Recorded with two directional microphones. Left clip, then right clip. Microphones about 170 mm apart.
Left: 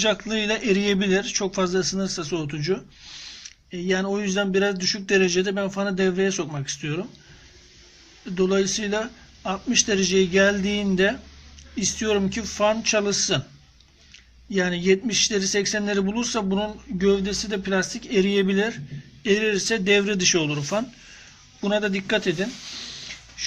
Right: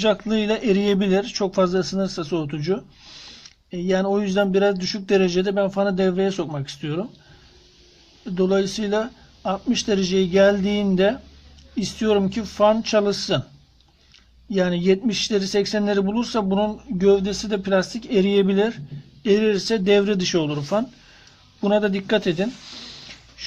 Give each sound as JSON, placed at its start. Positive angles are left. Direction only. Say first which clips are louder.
{"t": 0.0, "sound": "speech", "louder": "right 2 dB", "side_deg": -50}
{"t": 8.2, "sound": "speech", "louder": "right 1 dB", "side_deg": -45}
{"t": 14.5, "sound": "speech", "louder": "right 1 dB", "side_deg": -50}